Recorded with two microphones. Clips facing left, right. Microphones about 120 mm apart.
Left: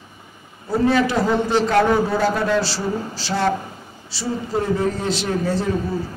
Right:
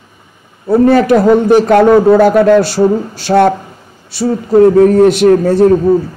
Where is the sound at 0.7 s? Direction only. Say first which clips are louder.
Right 10 dB; 55° right (ahead or behind).